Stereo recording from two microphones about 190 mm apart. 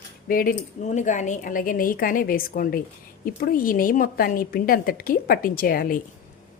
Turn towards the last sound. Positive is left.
turn(degrees=50)  # may be behind; listen again after turning